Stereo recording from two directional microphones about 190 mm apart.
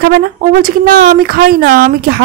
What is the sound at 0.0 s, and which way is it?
A woman's voice, 45° right (ahead or behind).